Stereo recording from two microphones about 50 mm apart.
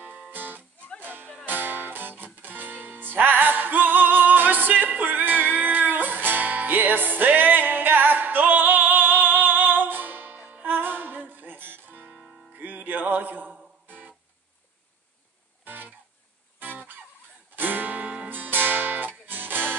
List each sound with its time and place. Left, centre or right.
0.0 s music: right
15.6 s music: right
18.3 s music: right